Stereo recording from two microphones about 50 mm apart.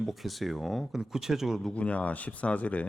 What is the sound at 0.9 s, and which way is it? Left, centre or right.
Speech, centre.